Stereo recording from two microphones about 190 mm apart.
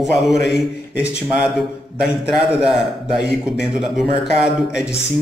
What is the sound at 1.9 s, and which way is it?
A man's voice, 5° right (ahead or behind).